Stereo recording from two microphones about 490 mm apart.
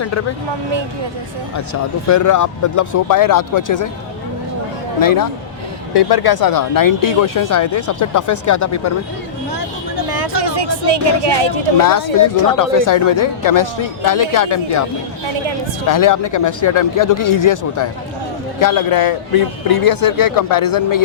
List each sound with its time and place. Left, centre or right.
1.5 s speech: left
4.9 s a man's voice: left
10.1 s speech: right
11.8 s speech: left
15.9 s a man's voice: left